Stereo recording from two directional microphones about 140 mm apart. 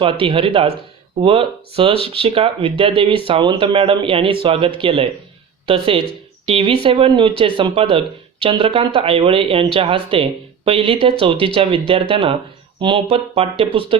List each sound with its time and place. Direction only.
0.0 s speech: 40° right (ahead or behind)